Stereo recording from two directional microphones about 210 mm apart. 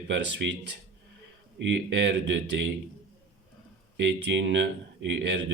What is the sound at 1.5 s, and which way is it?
Speech, 55° right (ahead or behind).